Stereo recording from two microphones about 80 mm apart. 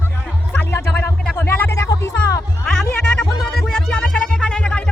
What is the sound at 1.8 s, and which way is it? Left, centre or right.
Speech, left.